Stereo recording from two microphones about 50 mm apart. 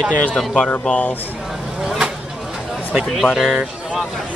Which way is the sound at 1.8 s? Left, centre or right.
Centre.